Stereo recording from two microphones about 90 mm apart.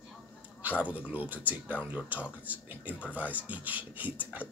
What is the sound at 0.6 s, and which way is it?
Speech, 15° right (ahead or behind).